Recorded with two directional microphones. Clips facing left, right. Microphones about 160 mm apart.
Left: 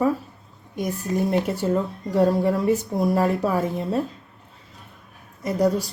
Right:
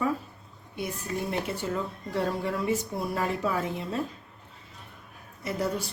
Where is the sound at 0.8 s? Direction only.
40° left (ahead or behind).